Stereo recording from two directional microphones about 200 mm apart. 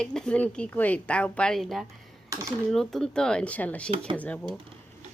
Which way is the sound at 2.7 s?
Centre (ahead or behind).